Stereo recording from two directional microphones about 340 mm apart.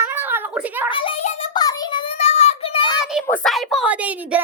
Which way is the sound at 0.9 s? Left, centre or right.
Centre.